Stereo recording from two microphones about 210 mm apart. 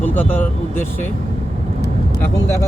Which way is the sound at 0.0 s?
10° left (ahead or behind).